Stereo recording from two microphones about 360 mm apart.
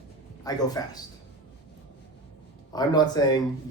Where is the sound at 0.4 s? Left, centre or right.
Centre.